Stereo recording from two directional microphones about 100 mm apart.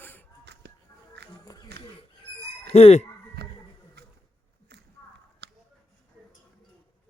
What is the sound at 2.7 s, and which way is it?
Speech, 90° left.